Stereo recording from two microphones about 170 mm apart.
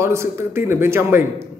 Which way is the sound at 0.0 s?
15° right (ahead or behind).